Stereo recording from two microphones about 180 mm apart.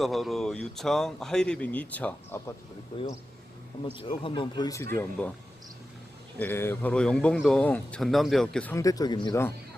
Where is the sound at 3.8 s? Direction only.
30° left (ahead or behind).